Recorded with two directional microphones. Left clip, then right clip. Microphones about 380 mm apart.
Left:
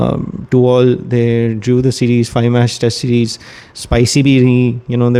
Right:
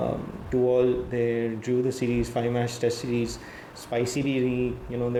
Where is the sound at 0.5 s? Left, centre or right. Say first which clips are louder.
Left 12 dB; left.